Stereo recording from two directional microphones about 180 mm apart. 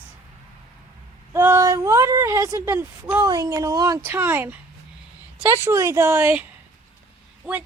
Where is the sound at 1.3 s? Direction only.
15° right (ahead or behind).